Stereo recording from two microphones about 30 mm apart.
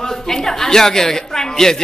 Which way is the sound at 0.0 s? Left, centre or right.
Centre.